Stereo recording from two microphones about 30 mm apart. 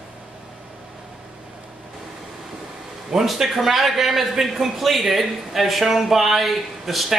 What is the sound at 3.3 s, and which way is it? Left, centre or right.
A man's voice, centre.